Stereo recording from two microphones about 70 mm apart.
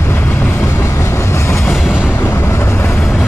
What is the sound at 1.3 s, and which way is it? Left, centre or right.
Train, left.